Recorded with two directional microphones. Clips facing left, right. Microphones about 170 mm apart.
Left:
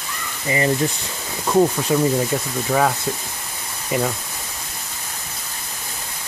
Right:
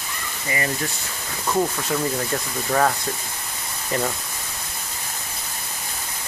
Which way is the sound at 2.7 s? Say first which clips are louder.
Left 1 dB; 5° left (ahead or behind).